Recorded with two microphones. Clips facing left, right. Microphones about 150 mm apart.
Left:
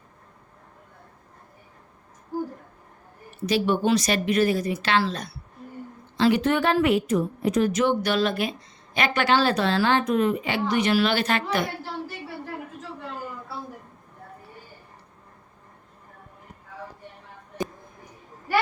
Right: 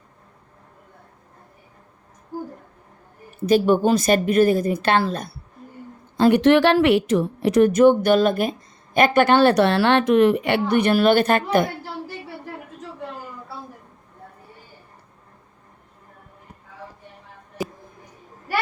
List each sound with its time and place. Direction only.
3.4 s a woman's voice: 45° right (ahead or behind)
6.4 s a woman's voice: 85° right
7.7 s speech: 50° right (ahead or behind)